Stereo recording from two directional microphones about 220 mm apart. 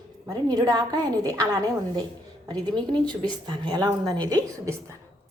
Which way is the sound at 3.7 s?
20° right (ahead or behind).